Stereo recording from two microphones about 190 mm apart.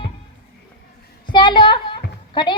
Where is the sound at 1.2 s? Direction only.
25° left (ahead or behind).